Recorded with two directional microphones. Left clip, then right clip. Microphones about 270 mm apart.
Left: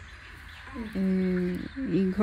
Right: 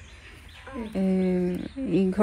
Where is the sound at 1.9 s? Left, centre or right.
Right.